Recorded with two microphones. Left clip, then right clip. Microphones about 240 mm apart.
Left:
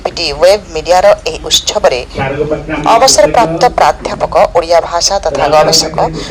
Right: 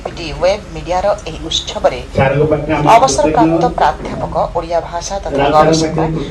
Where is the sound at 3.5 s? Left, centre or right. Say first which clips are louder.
Left 4 dB; left.